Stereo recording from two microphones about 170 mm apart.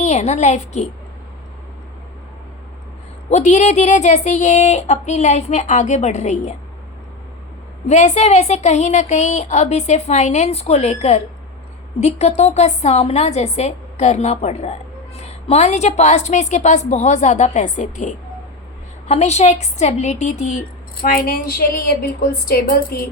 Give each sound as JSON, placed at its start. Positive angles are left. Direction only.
{"t": 0.0, "sound": "a woman's voice", "side_deg": 40}
{"t": 3.2, "sound": "speech", "side_deg": 45}
{"t": 7.9, "sound": "a woman's voice", "side_deg": 40}